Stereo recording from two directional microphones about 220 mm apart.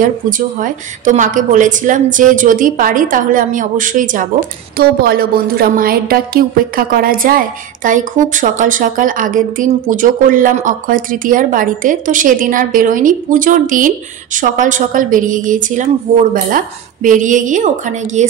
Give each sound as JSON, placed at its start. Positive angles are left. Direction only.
{"t": 0.0, "sound": "a woman's voice", "side_deg": -35}